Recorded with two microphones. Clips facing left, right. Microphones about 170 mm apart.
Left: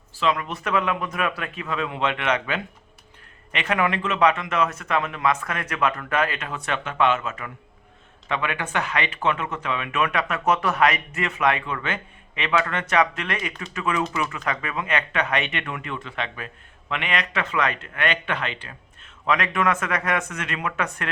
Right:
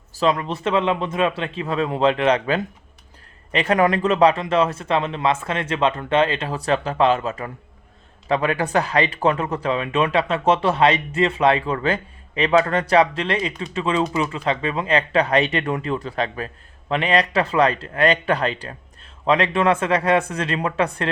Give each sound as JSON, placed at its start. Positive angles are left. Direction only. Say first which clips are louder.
{"t": 0.1, "sound": "speech", "louder": "right 4 dB", "side_deg": -35}